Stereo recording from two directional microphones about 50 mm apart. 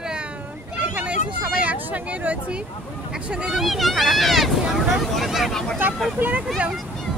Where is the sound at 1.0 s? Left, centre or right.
Right.